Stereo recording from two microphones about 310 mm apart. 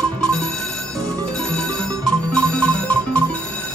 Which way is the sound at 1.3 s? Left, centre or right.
Centre.